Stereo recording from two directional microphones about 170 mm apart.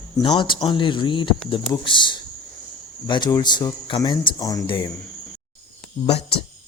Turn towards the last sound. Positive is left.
turn(degrees=35)  # may be behind; listen again after turning